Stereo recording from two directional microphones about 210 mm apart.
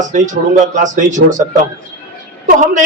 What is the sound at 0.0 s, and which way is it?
A man's voice, 35° right (ahead or behind).